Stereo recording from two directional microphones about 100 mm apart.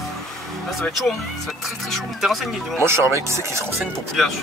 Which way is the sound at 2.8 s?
25° right (ahead or behind).